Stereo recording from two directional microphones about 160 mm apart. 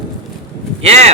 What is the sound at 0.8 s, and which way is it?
Speech, 45° right (ahead or behind).